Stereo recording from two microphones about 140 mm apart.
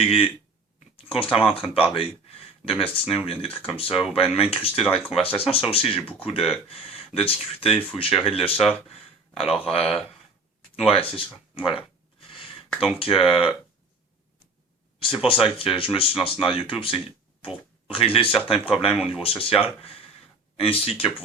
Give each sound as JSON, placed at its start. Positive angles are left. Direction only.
{"t": 0.0, "sound": "speech", "side_deg": 45}
{"t": 11.5, "sound": "a sound", "side_deg": 40}
{"t": 12.8, "sound": "speech", "side_deg": 40}
{"t": 14.9, "sound": "speech", "side_deg": 40}